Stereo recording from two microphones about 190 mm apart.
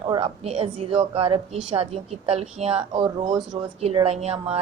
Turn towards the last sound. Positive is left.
turn(degrees=-30)  # may be behind; listen again after turning